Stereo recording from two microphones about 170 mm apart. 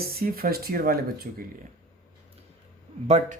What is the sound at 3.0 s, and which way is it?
Speech, 40° right (ahead or behind).